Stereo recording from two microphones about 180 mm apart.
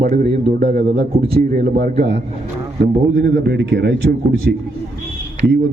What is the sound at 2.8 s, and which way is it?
Speech, 75° right (ahead or behind).